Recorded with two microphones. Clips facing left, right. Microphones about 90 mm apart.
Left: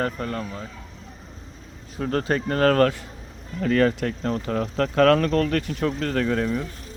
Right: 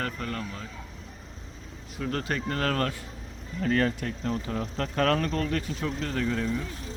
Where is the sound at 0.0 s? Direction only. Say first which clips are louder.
Left 6 dB; 30° left (ahead or behind).